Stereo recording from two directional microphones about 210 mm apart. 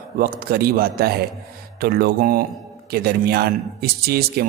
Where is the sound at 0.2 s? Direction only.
45° right (ahead or behind).